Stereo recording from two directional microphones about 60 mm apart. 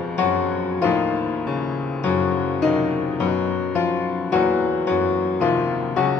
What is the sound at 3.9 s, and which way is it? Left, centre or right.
Music, left.